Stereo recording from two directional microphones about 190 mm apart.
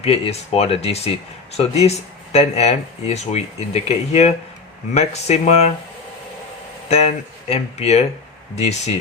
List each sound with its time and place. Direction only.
0.0 s speech: 30° left (ahead or behind)
6.8 s speech: 35° left (ahead or behind)